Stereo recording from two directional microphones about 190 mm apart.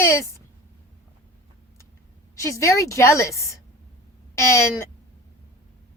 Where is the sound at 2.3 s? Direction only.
15° left (ahead or behind).